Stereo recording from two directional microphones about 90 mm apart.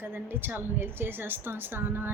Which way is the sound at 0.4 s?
25° right (ahead or behind).